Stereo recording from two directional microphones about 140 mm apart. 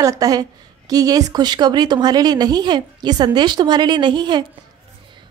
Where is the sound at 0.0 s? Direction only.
25° right (ahead or behind).